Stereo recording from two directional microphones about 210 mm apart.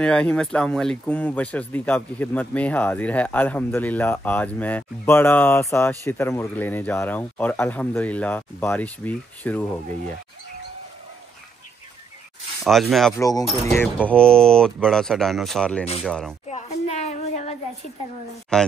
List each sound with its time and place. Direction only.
0.0 s speech: 5° left (ahead or behind)
12.6 s speech: centre (ahead or behind)
13.2 s speech: 15° left (ahead or behind)
14.0 s speech: 5° left (ahead or behind)
16.4 s a sound: 30° left (ahead or behind)
18.5 s speech: 5° left (ahead or behind)